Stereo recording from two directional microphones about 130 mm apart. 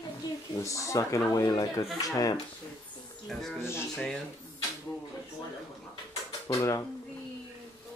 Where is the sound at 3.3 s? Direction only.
Centre (ahead or behind).